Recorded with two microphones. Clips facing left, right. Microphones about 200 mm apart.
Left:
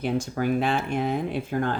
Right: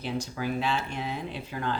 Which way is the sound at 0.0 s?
55° left (ahead or behind).